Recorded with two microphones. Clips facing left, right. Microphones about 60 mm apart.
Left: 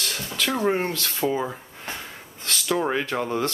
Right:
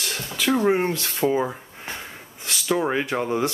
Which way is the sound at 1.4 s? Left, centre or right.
Centre.